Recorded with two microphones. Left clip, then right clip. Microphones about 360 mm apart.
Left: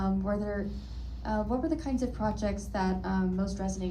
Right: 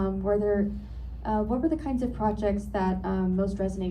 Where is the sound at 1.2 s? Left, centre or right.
Centre.